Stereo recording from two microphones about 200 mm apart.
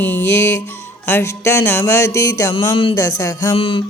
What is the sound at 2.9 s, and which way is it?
Music, 15° left (ahead or behind).